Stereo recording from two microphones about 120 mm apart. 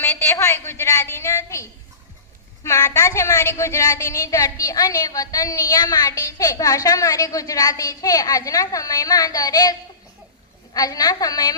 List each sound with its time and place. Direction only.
0.0 s a woman's voice: 25° left (ahead or behind)
2.6 s a woman's voice: 25° left (ahead or behind)
10.8 s a woman's voice: 30° left (ahead or behind)